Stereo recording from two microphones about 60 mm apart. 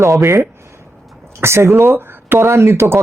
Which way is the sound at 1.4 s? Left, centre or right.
Right.